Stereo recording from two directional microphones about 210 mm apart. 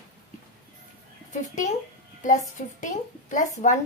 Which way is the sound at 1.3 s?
35° left (ahead or behind).